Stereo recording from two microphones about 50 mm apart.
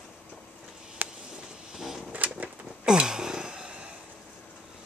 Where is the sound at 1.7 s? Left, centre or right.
Centre.